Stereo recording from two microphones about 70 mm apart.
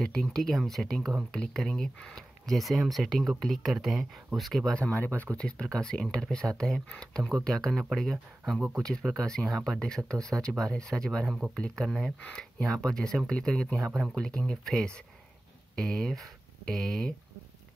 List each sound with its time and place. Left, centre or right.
0.0 s speech: centre
4.7 s speech: left
5.4 s speech: centre